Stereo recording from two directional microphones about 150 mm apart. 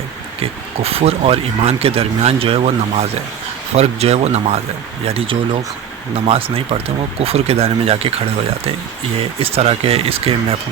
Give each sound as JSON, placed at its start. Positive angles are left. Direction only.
{"t": 0.8, "sound": "speech", "side_deg": -40}
{"t": 9.4, "sound": "speech", "side_deg": -40}